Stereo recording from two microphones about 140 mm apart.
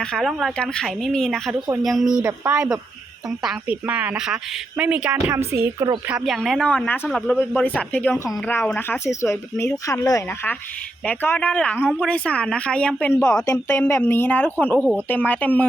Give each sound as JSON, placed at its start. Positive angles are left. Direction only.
{"t": 0.0, "sound": "speech", "side_deg": 5}
{"t": 1.5, "sound": "a woman's voice", "side_deg": -30}
{"t": 1.8, "sound": "a woman's voice", "side_deg": 0}
{"t": 6.1, "sound": "speech", "side_deg": -5}
{"t": 7.1, "sound": "speech", "side_deg": 0}
{"t": 7.3, "sound": "speech", "side_deg": 10}